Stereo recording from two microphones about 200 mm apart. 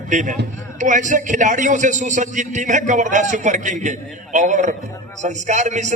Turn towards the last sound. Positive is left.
turn(degrees=-35)  # may be behind; listen again after turning